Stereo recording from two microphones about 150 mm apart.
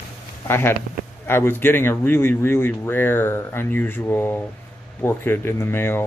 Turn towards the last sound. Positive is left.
turn(degrees=15)  # may be behind; listen again after turning